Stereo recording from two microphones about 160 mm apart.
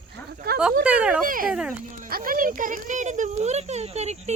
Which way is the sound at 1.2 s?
60° right (ahead or behind).